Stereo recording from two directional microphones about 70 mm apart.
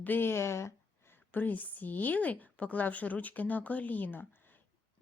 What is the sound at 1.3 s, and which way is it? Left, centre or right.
A woman's voice, left.